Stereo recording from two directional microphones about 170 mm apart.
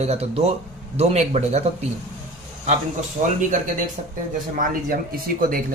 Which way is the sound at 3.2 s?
45° right (ahead or behind).